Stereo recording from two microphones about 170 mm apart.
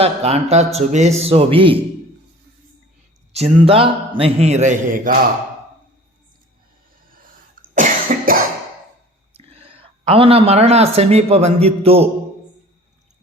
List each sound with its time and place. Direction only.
0.0 s a man's voice: 40° right (ahead or behind)
3.3 s a man's voice: 35° right (ahead or behind); by 5.1 s 55° right (ahead or behind)
7.1 s cough: 55° right (ahead or behind)
9.3 s speech: 35° right (ahead or behind)